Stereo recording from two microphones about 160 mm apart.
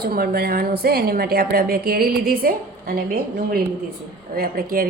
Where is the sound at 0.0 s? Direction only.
70° right (ahead or behind).